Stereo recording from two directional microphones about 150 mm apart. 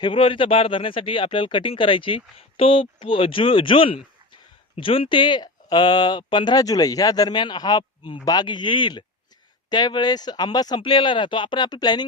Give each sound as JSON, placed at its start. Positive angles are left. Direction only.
{"t": 0.0, "sound": "speech", "side_deg": 35}